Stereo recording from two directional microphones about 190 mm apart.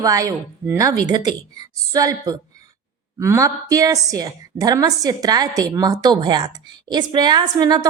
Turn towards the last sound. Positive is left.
turn(degrees=-20)  # may be behind; listen again after turning